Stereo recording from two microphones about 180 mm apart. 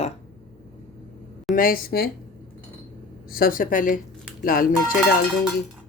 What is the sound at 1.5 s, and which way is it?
Speech, 55° left (ahead or behind).